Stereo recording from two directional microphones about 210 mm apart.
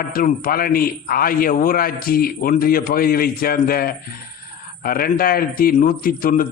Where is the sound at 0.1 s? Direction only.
45° left (ahead or behind).